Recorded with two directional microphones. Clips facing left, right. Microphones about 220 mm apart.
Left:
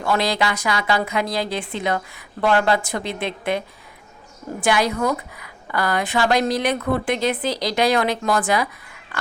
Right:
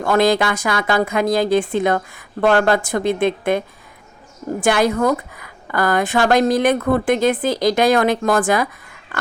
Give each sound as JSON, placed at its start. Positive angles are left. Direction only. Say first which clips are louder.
{"t": 0.0, "sound": "a woman's voice", "louder": "right 6 dB", "side_deg": -50}
{"t": 4.6, "sound": "a woman's voice", "louder": "right 4 dB", "side_deg": -50}